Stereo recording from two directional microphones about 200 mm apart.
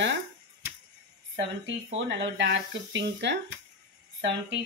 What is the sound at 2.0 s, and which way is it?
Speech, 65° right (ahead or behind).